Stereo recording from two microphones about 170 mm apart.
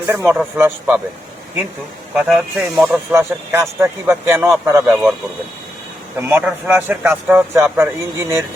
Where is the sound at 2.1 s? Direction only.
5° right (ahead or behind).